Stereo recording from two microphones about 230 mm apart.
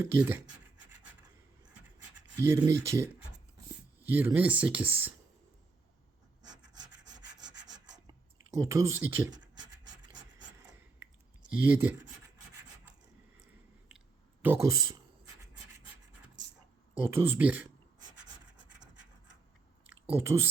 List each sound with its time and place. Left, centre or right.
0.0 s speech: centre
2.3 s speech: centre
6.5 s rub: right
8.4 s speech: centre
9.9 s rub: right
11.0 s clicking: centre
14.4 s speech: centre
17.0 s speech: centre
19.9 s speech: centre